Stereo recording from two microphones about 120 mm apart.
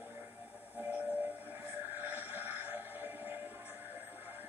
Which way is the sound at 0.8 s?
15° right (ahead or behind).